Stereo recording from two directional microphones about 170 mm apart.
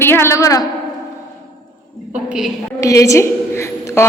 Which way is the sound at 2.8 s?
20° left (ahead or behind).